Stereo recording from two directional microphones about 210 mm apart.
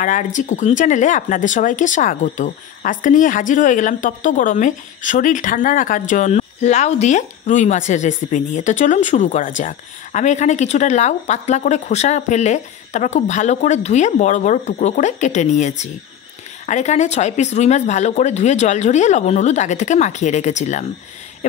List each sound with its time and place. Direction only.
0.0 s speech: 35° left (ahead or behind)